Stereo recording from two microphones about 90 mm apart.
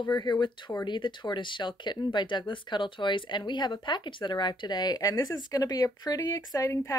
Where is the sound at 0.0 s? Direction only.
55° left (ahead or behind).